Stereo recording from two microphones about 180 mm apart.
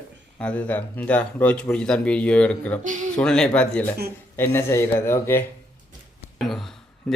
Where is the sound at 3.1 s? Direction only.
5° left (ahead or behind).